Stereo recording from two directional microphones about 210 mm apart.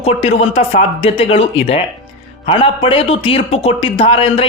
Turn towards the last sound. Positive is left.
turn(degrees=25)  # may be behind; listen again after turning